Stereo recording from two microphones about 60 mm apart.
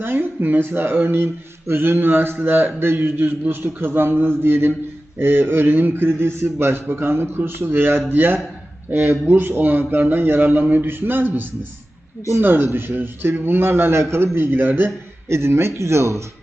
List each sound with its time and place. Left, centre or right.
0.0 s speech: right
14.3 s speech: right
15.3 s speech: right